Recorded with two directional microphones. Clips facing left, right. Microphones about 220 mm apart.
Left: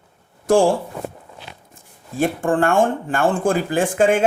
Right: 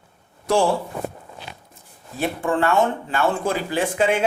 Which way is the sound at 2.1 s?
50° left (ahead or behind).